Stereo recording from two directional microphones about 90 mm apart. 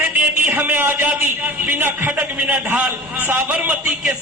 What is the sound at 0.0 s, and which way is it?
A man's voice, 20° right (ahead or behind).